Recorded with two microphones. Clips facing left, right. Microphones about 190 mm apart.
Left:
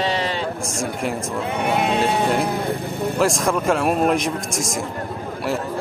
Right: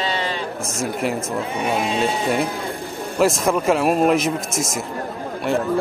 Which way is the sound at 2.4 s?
60° left (ahead or behind).